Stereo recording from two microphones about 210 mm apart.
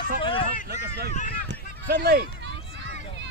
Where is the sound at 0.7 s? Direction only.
45° right (ahead or behind).